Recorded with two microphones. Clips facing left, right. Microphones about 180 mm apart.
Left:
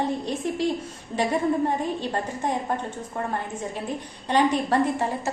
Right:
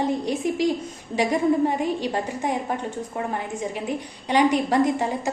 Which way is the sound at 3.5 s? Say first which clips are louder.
Right 3 dB; 10° right (ahead or behind).